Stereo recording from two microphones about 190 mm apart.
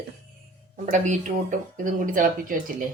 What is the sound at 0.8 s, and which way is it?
Speech, 40° right (ahead or behind).